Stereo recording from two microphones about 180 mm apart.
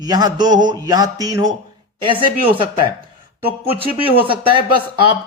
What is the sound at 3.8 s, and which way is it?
Speech, 30° right (ahead or behind).